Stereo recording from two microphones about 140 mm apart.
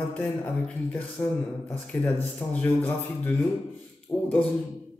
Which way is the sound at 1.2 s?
15° left (ahead or behind).